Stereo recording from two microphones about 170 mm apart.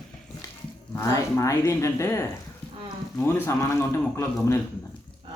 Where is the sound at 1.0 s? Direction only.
15° left (ahead or behind).